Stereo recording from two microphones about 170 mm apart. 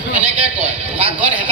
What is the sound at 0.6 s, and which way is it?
Speech, 35° right (ahead or behind).